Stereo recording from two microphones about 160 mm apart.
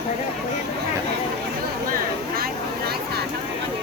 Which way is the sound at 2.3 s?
75° right (ahead or behind).